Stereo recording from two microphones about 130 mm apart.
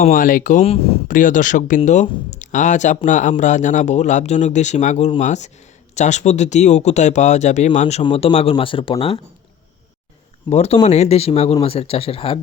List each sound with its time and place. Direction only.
0.0 s speech: 90° left
0.6 s speech: 50° left (ahead or behind)
1.0 s speech: 90° left; by 9.2 s 45° left (ahead or behind)
10.5 s speech: 55° left (ahead or behind)